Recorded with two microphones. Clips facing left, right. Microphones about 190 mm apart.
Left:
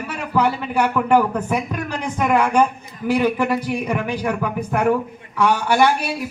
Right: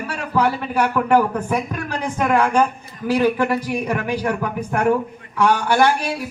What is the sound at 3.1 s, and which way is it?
A man's voice, 15° left (ahead or behind).